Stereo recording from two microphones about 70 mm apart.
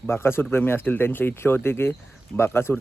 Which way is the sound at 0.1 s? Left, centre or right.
Left.